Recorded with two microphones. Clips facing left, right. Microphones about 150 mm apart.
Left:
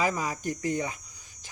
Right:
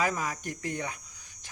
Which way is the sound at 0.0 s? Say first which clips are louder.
Left 2 dB; centre (ahead or behind).